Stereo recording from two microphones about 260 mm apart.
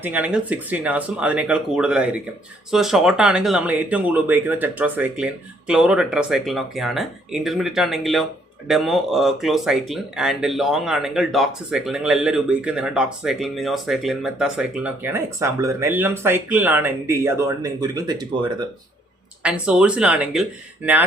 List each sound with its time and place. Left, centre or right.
0.0 s speech: centre
19.4 s speech: centre